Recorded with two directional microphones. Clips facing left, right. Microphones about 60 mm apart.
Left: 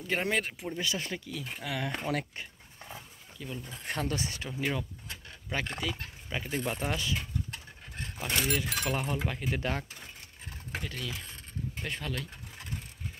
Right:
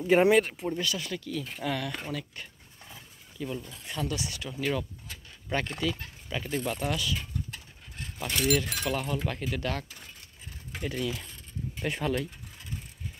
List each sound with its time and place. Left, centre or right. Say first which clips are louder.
0.0 s speech: right 10 dB; centre
0.3 s speech: right 8 dB; centre
0.9 s speech: right 1 dB; left
1.2 s speech: right 5 dB; centre
1.8 s speech: even; left
3.3 s speech: right 6 dB; centre
3.8 s speech: left 2 dB; left
4.5 s speech: right 4 dB; centre
10.8 s speech: right 10 dB; centre